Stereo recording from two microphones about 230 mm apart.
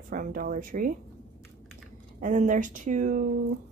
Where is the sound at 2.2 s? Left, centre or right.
Right.